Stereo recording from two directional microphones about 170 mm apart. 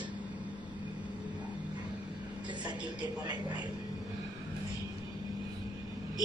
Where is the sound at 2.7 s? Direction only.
25° right (ahead or behind).